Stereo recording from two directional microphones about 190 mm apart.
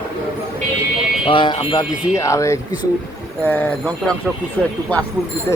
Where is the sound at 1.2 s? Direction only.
25° left (ahead or behind); by 4.1 s 5° left (ahead or behind).